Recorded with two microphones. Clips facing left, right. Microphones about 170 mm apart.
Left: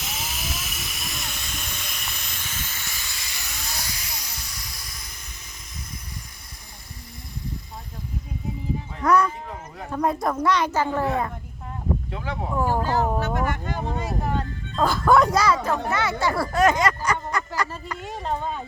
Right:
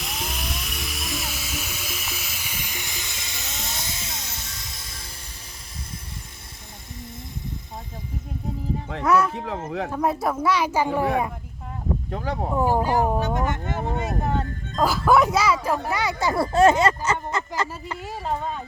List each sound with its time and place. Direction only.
0.0 s music: centre (ahead or behind); by 5.0 s 25° right (ahead or behind)
9.0 s speech: 5° right (ahead or behind)
9.6 s speech: 90° right
9.9 s speech: 5° right (ahead or behind)
12.1 s speech: 40° right (ahead or behind)
12.5 s speech: 15° right (ahead or behind)
14.8 s speech: 5° right (ahead or behind); by 17.7 s 25° right (ahead or behind)
18.0 s speech: 5° right (ahead or behind)